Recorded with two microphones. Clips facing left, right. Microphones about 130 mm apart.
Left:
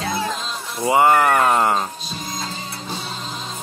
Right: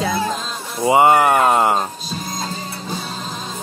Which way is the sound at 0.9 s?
20° right (ahead or behind).